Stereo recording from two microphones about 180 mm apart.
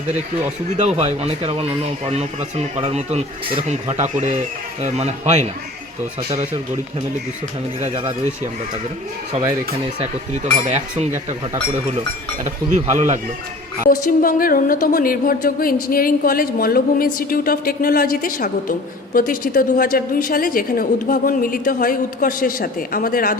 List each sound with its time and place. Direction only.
0.8 s speech: 35° right (ahead or behind)
2.8 s speech: 35° right (ahead or behind)
7.8 s speech: 30° right (ahead or behind)
10.0 s speech: 35° right (ahead or behind)
12.7 s speech: 40° right (ahead or behind)
13.8 s a woman's voice: 50° left (ahead or behind)